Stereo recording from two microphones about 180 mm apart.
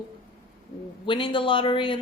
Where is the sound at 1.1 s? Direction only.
25° left (ahead or behind).